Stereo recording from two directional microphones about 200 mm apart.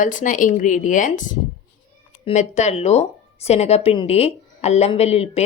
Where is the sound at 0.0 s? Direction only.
40° left (ahead or behind).